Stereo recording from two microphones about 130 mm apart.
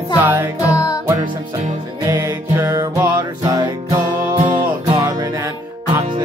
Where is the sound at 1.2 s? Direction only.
35° right (ahead or behind).